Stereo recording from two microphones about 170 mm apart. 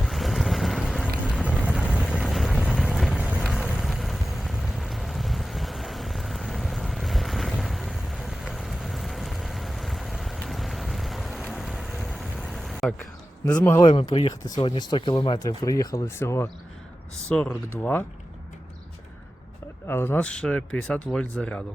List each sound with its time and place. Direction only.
0.0 s boat: centre (ahead or behind)
1.7 s vehicle: 5° right (ahead or behind)
13.5 s speech: 10° left (ahead or behind)
13.8 s speech: 25° left (ahead or behind); by 18.0 s 10° left (ahead or behind)
19.9 s speech: 15° left (ahead or behind)